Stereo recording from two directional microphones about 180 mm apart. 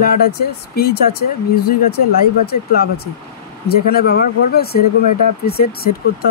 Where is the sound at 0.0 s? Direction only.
55° left (ahead or behind).